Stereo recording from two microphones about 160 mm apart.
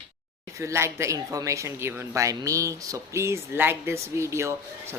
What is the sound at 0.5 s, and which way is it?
Speech, 15° right (ahead or behind).